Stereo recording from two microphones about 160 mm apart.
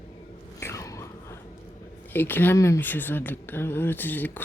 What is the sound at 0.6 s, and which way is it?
Biting, 20° left (ahead or behind).